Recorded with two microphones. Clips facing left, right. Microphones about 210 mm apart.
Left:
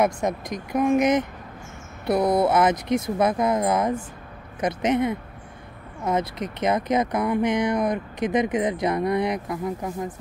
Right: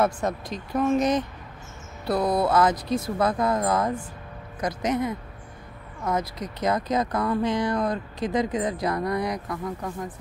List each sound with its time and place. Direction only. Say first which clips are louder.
0.0 s speech: left 2 dB; 15° left (ahead or behind)